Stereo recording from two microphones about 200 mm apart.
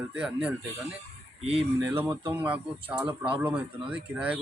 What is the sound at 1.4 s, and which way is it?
Speech, 30° right (ahead or behind).